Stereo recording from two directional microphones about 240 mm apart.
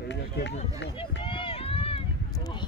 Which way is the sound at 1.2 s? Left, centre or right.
Left.